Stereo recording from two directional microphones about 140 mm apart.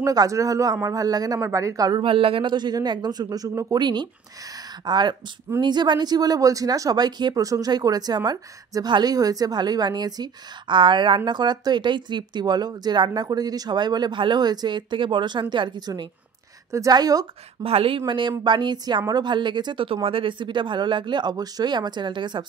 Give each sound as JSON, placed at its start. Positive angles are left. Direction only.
{"t": 0.0, "sound": "speech", "side_deg": -25}
{"t": 17.6, "sound": "speech", "side_deg": -45}